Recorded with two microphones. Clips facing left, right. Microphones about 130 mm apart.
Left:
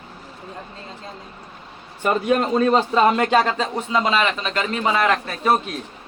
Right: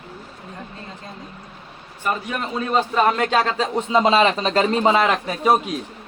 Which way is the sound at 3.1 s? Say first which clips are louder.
Left 3 dB; 10° left (ahead or behind).